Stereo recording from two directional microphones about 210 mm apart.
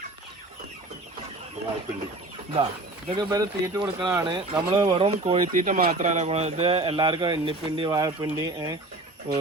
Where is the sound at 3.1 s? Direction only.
20° right (ahead or behind).